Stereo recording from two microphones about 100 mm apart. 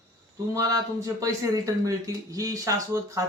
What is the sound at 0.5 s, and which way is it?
Speech, 35° right (ahead or behind).